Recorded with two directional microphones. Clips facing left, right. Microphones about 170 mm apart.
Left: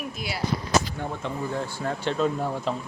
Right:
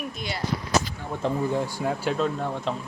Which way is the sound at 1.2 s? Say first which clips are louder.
Right 9 dB; 35° right (ahead or behind).